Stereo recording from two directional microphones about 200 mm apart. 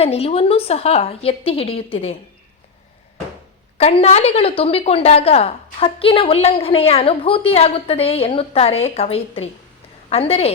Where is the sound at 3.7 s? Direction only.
30° left (ahead or behind).